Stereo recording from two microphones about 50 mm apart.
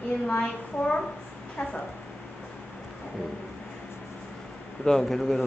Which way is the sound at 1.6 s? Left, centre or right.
Left.